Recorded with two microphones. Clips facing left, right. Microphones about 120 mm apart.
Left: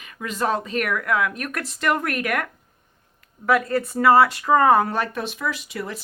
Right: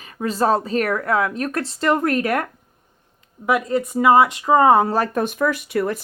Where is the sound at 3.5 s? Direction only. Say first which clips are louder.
Right 1 dB; 20° right (ahead or behind).